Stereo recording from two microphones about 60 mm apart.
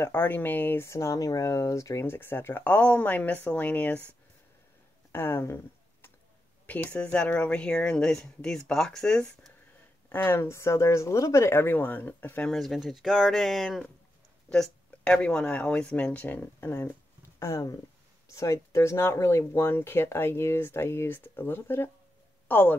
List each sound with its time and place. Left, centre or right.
0.1 s speech: left
0.8 s speech: left
2.0 s speech: left
5.1 s speech: left
6.6 s speech: left; by 9.5 s centre
10.0 s speech: left
12.4 s speech: centre
14.5 s speech: centre; by 16.9 s left
17.4 s speech: left